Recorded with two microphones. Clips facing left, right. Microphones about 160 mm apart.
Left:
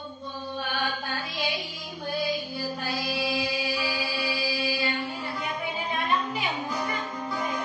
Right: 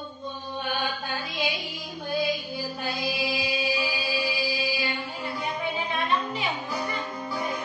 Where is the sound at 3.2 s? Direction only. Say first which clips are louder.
Even; 20° right (ahead or behind).